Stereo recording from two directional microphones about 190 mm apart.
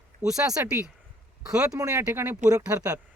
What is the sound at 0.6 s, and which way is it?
Speech, 10° right (ahead or behind).